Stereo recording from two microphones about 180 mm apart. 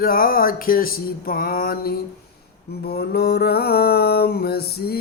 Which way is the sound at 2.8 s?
60° left (ahead or behind).